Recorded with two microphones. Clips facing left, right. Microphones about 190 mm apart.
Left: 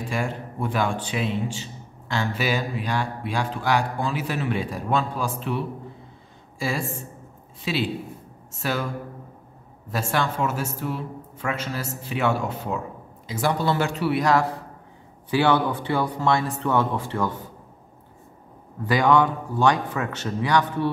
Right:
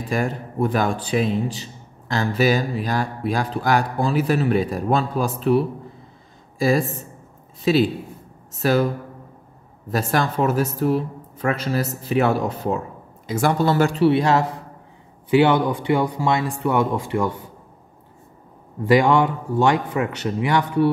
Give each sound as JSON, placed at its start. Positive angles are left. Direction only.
{"t": 0.1, "sound": "a man's voice", "side_deg": -40}
{"t": 7.6, "sound": "a man's voice", "side_deg": -40}
{"t": 10.1, "sound": "a man's voice", "side_deg": -40}
{"t": 13.3, "sound": "speech", "side_deg": -50}
{"t": 14.0, "sound": "speech", "side_deg": -25}
{"t": 18.9, "sound": "speech", "side_deg": -20}